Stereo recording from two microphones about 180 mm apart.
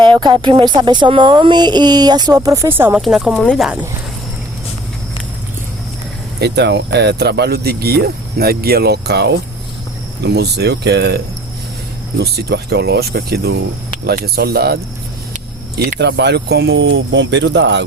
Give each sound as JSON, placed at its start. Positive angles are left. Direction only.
{"t": 0.0, "sound": "speech", "side_deg": -25}
{"t": 6.4, "sound": "speech", "side_deg": -70}
{"t": 12.2, "sound": "speech", "side_deg": -65}
{"t": 16.0, "sound": "speech", "side_deg": -70}